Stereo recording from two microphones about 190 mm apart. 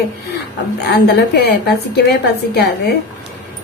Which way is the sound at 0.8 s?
60° left (ahead or behind).